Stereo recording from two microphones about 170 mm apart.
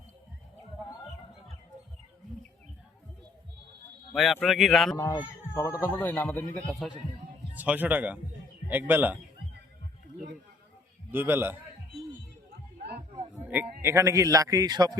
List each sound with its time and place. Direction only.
4.1 s a man's voice: centre (ahead or behind)
4.9 s a man's voice: 15° left (ahead or behind)
7.5 s speech: 10° right (ahead or behind)
11.1 s speech: 10° right (ahead or behind)
13.4 s a man's voice: 10° right (ahead or behind)